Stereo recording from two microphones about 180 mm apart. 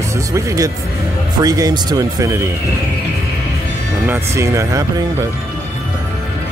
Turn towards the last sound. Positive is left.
turn(degrees=-15)  # may be behind; listen again after turning